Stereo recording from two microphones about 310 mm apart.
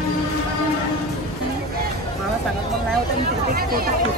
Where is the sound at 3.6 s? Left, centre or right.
Right.